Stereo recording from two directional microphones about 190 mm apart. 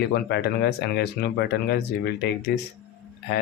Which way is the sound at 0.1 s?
60° left (ahead or behind).